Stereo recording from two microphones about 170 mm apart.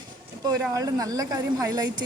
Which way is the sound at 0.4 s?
20° right (ahead or behind).